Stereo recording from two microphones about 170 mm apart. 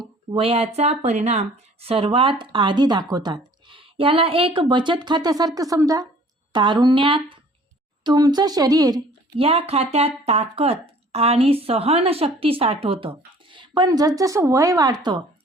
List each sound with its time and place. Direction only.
0.3 s speech: 35° right (ahead or behind)
9.4 s speech: 35° right (ahead or behind)